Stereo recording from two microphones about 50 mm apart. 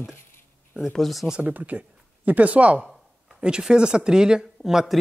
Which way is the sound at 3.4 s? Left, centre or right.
Centre.